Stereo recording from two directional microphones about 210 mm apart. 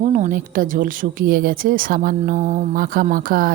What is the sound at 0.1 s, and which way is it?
A woman's voice, 40° right (ahead or behind).